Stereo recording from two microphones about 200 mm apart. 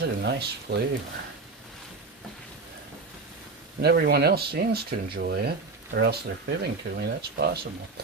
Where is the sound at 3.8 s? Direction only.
55° right (ahead or behind).